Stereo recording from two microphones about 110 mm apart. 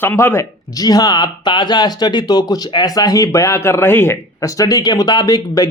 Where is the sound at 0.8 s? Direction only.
35° left (ahead or behind).